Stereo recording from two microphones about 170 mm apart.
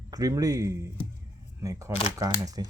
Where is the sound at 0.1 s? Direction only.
20° right (ahead or behind).